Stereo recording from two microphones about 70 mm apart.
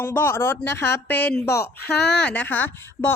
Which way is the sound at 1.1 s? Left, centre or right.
Left.